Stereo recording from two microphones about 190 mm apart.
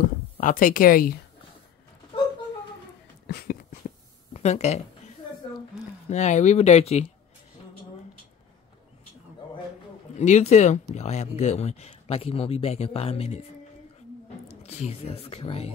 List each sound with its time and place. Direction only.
0.4 s speech: 45° left (ahead or behind)
3.3 s a sound: 55° left (ahead or behind)
4.3 s speech: 35° left (ahead or behind)
6.0 s speech: 40° left (ahead or behind)
10.1 s speech: 35° left (ahead or behind)
14.6 s speech: 30° left (ahead or behind)